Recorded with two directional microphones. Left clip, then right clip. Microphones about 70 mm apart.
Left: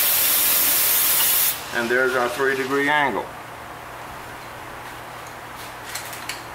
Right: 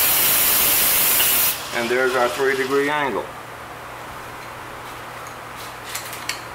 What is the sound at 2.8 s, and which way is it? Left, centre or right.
Speech, left.